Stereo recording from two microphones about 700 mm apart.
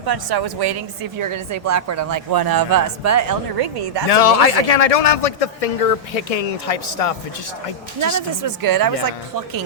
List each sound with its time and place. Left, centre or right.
0.0 s a woman's voice: right
4.1 s a man's voice: left
8.4 s speech: right